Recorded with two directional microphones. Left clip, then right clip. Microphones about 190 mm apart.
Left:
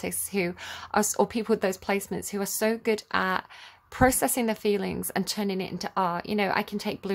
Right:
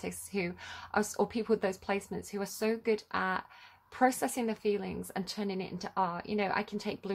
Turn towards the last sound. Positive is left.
turn(degrees=25)  # may be behind; listen again after turning